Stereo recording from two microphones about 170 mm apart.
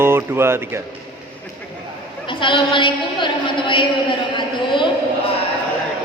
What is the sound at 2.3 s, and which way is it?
A woman's voice, 30° left (ahead or behind).